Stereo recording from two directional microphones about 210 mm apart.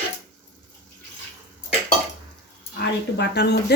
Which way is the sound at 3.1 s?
55° left (ahead or behind).